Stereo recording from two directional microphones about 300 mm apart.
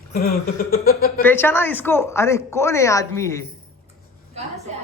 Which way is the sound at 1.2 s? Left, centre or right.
Centre.